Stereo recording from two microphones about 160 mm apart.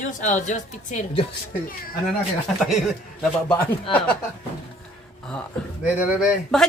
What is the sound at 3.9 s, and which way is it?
Speech, 10° left (ahead or behind).